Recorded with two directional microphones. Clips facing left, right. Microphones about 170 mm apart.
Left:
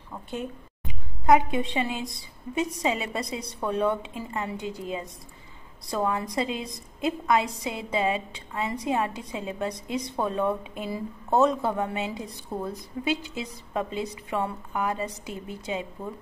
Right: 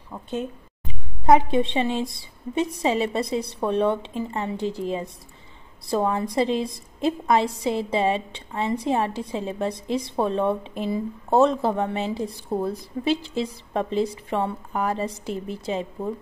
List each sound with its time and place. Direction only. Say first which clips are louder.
1.2 s a woman's voice: right 3 dB; 30° right (ahead or behind)